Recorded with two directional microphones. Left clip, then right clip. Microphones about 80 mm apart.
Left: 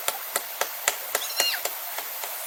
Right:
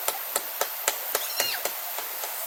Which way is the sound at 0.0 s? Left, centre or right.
Left.